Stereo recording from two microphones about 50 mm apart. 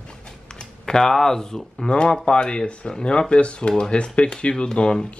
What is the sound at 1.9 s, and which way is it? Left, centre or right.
Speech, centre.